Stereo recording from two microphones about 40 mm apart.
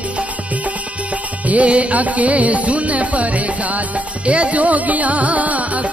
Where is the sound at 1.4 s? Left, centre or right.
Right.